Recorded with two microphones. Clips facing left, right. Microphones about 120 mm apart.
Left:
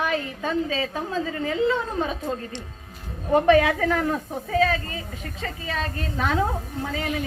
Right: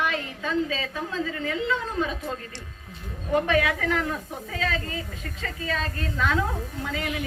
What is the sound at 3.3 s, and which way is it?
Speech, 35° left (ahead or behind).